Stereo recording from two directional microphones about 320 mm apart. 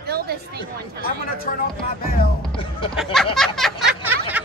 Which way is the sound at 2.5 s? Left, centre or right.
Centre.